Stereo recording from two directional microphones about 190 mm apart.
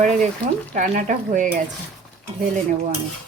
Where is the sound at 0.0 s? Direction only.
40° right (ahead or behind).